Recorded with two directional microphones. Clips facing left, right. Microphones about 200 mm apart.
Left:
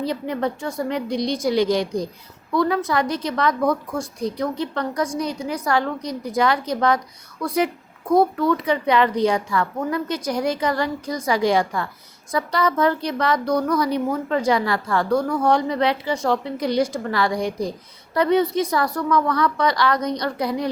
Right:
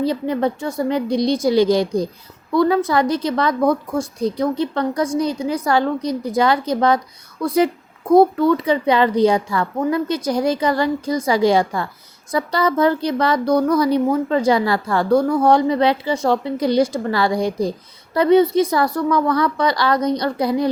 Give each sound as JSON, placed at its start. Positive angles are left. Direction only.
{"t": 0.0, "sound": "a woman's voice", "side_deg": -30}